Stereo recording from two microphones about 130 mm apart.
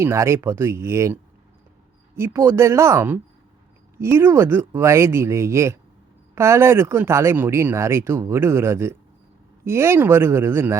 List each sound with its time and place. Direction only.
0.0 s speech: 20° right (ahead or behind)